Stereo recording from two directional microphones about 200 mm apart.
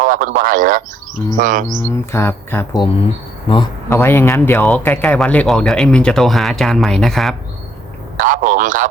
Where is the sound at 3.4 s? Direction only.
25° left (ahead or behind).